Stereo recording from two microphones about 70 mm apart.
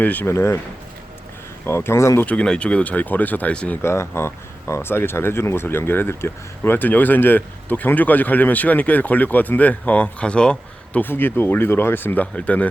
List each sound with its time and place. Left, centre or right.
0.0 s speech: left
0.3 s speech: left
1.6 s speech: left
2.2 s speech: centre
3.8 s speech: left; by 11.0 s centre
11.0 s speech: left